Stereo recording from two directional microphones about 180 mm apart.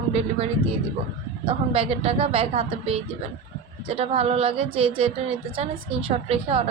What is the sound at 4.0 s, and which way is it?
A woman's voice, 35° right (ahead or behind).